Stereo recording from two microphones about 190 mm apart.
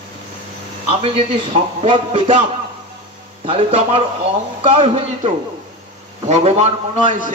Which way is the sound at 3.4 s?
30° right (ahead or behind).